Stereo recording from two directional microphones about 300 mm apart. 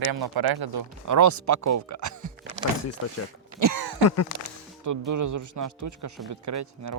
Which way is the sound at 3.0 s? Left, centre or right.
Left.